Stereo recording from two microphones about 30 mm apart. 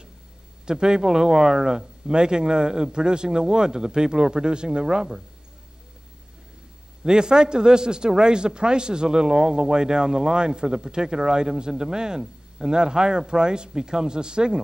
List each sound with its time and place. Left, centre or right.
0.7 s a man's voice: right
7.0 s a man's voice: right